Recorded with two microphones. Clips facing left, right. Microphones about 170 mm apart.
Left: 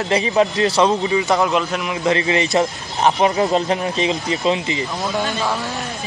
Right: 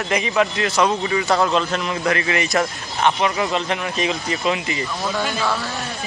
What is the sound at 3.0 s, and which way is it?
Speech, 35° left (ahead or behind).